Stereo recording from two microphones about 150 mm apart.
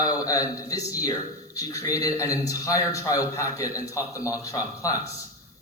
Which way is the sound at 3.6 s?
10° right (ahead or behind).